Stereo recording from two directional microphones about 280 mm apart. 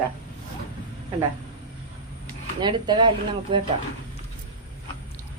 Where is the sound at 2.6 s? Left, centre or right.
Centre.